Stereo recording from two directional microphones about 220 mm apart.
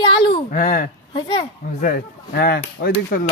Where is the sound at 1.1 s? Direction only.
20° left (ahead or behind).